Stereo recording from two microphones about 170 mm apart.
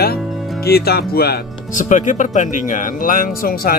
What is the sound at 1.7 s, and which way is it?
Speech, 45° left (ahead or behind).